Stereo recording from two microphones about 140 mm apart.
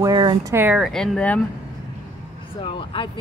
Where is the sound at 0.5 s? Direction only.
10° right (ahead or behind).